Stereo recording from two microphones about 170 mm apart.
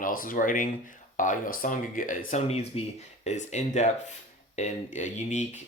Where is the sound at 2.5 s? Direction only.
35° left (ahead or behind).